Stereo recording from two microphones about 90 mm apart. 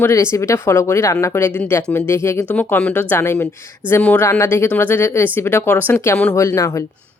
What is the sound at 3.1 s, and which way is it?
Speech, 30° left (ahead or behind).